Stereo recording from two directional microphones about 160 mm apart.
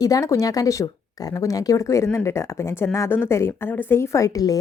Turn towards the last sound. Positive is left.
turn(degrees=20)  # may be behind; listen again after turning